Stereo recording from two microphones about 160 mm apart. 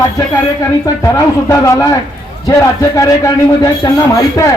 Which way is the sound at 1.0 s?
20° left (ahead or behind).